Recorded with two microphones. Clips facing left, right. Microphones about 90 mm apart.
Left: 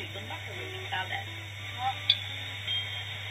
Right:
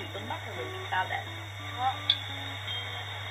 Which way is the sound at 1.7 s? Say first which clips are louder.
Right 2 dB; 30° right (ahead or behind).